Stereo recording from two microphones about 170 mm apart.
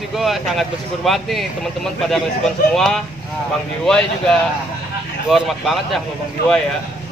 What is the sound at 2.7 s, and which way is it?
Speech, 5° left (ahead or behind).